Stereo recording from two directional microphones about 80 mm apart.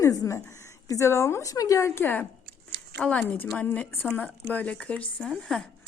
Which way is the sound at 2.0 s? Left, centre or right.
Left.